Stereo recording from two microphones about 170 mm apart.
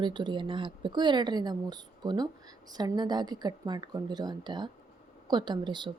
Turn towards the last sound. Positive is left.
turn(degrees=-25)  # may be behind; listen again after turning